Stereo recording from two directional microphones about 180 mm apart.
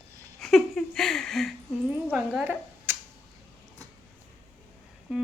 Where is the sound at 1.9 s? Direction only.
5° right (ahead or behind).